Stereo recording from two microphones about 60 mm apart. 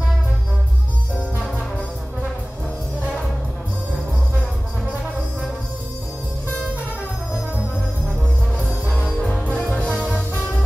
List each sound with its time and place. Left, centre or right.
9.0 s music: centre
9.4 s music: left